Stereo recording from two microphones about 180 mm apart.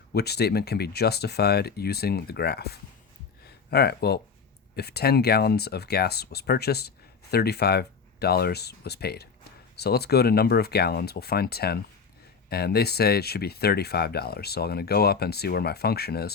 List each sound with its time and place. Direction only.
0.1 s speech: 65° left (ahead or behind)
3.4 s a sound: 65° left (ahead or behind)
4.7 s speech: 65° left (ahead or behind)